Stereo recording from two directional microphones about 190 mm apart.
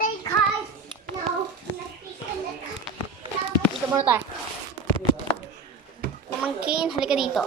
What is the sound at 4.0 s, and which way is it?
Speech, 10° right (ahead or behind).